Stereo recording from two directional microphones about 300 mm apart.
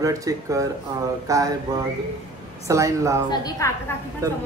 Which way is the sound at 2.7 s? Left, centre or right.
Centre.